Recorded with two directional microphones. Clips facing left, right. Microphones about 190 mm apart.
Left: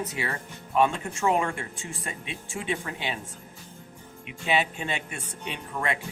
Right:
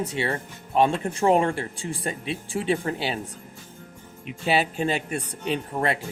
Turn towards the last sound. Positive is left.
turn(degrees=-35)  # may be behind; listen again after turning